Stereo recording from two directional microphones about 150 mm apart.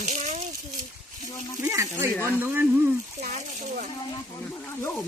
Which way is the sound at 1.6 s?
20° right (ahead or behind).